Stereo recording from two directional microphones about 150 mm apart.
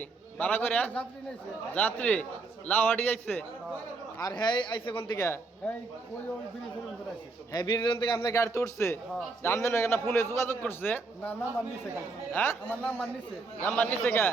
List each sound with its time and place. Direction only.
0.0 s a man's voice: 10° left (ahead or behind)
4.2 s speech: 25° left (ahead or behind)
5.1 s a man's voice: 20° left (ahead or behind)
7.5 s a man's voice: 30° left (ahead or behind); by 14.3 s 10° left (ahead or behind)